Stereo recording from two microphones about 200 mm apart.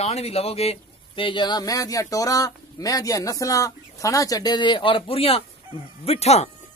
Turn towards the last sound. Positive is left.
turn(degrees=30)  # may be behind; listen again after turning